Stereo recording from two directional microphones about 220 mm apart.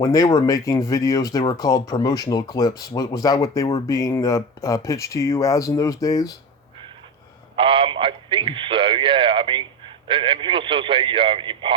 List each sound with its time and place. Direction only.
0.0 s speech: 15° left (ahead or behind)
7.5 s a man's voice: 25° right (ahead or behind)